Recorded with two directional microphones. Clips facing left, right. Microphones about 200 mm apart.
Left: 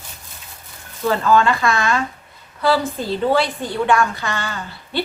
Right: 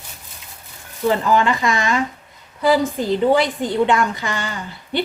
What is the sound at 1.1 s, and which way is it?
A woman's voice, 15° right (ahead or behind).